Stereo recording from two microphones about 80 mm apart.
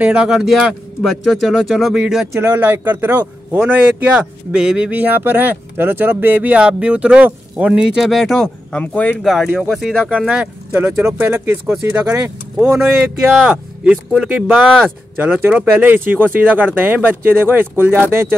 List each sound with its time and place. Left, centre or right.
0.0 s speech: centre
2.4 s a man's voice: right; by 8.5 s centre
8.7 s speech: centre
9.2 s speech: centre
10.7 s a man's voice: right; by 14.6 s centre
15.1 s a man's voice: right